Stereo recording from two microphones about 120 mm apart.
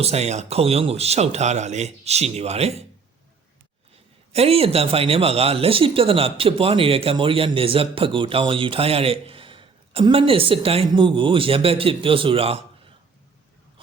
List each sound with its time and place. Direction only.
0.0 s speech: 60° right (ahead or behind)
4.3 s speech: 55° right (ahead or behind)